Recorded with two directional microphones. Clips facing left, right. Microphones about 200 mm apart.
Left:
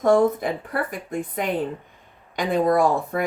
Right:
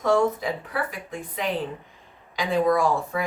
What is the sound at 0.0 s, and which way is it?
Speech, 50° left (ahead or behind).